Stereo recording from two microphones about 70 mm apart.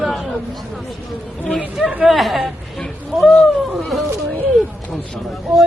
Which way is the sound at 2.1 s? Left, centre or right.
Centre.